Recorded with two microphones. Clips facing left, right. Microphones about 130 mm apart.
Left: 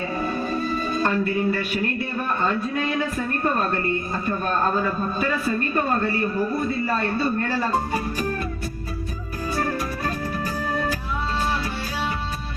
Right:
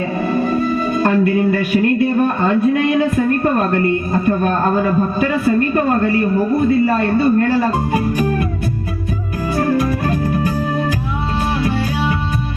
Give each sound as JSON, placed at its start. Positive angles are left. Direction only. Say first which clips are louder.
{"t": 0.3, "sound": "a man's voice", "louder": "right 11 dB", "side_deg": -55}
{"t": 9.6, "sound": "music", "louder": "right 11 dB", "side_deg": -55}